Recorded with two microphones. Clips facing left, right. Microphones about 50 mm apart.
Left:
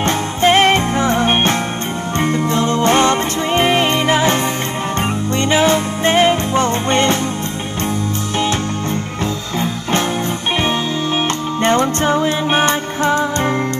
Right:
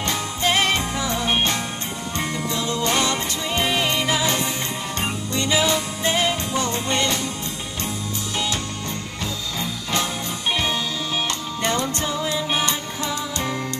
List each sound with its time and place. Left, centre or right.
0.0 s music: left
5.4 s music: left
11.6 s music: left